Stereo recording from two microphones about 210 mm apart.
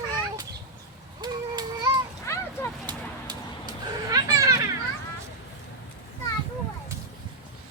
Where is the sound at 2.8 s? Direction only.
20° right (ahead or behind).